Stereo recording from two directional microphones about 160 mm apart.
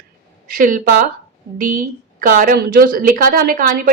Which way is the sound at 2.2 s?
60° right (ahead or behind).